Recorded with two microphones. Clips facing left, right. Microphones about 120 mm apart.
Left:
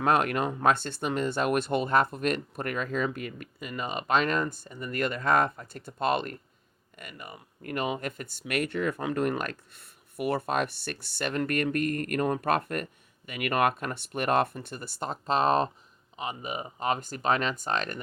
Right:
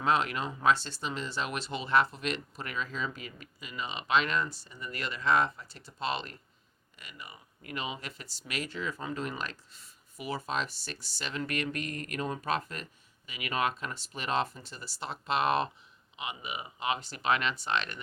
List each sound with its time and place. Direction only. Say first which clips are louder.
0.0 s speech: left 4 dB; 55° left (ahead or behind)